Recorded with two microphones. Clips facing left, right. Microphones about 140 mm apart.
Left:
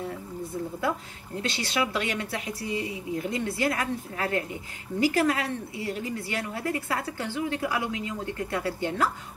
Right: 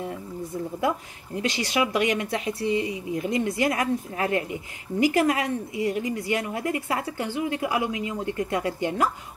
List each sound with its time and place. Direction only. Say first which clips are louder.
0.7 s speech: right 5 dB; 15° right (ahead or behind)